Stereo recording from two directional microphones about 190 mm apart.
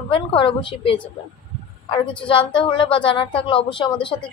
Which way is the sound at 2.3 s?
25° left (ahead or behind).